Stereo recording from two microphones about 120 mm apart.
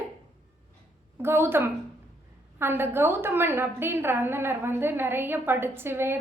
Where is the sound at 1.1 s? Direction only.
20° right (ahead or behind).